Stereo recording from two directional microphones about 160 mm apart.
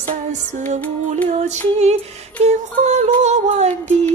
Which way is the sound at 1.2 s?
45° right (ahead or behind).